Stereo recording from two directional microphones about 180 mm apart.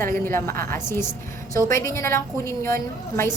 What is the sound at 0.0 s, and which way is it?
A woman's voice, 15° left (ahead or behind).